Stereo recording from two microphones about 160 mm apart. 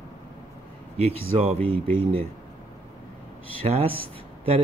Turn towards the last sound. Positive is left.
turn(degrees=-35)  # may be behind; listen again after turning